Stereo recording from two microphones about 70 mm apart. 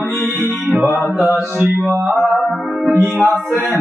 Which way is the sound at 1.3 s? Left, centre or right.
Right.